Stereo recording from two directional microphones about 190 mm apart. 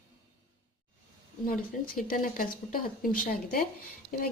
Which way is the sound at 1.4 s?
50° left (ahead or behind).